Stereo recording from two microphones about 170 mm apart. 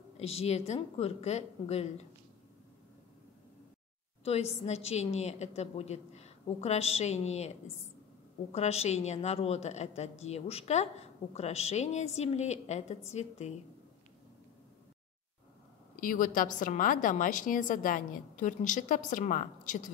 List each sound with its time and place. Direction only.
0.2 s a woman's voice: 40° left (ahead or behind)
4.2 s a woman's voice: 40° left (ahead or behind)
16.0 s a woman's voice: 50° left (ahead or behind)